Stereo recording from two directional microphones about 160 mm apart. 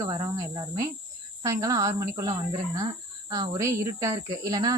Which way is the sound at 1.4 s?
20° right (ahead or behind).